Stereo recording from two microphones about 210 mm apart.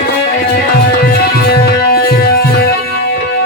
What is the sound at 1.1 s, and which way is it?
Music, 45° left (ahead or behind).